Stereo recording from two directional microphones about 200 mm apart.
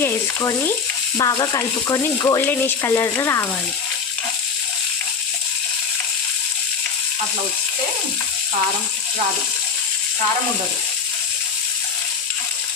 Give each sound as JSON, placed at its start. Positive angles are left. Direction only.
{"t": 0.0, "sound": "speech", "side_deg": 10}